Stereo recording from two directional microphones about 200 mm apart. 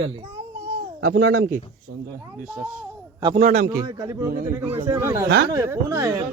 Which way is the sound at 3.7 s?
15° right (ahead or behind).